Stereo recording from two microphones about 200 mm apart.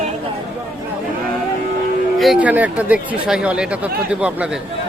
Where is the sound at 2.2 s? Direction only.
5° right (ahead or behind).